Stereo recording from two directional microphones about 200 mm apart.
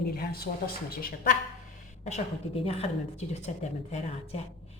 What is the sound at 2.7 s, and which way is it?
Speech, 30° left (ahead or behind).